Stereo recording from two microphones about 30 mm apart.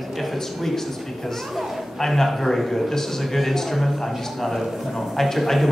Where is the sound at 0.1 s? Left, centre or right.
Centre.